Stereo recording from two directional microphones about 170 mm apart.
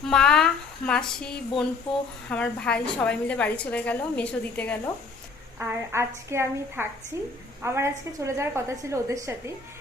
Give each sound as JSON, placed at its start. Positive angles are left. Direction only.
{"t": 0.1, "sound": "a woman's voice", "side_deg": 5}
{"t": 5.5, "sound": "a woman's voice", "side_deg": -15}